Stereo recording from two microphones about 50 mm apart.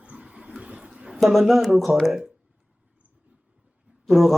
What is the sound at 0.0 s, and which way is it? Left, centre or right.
Vehicle, right.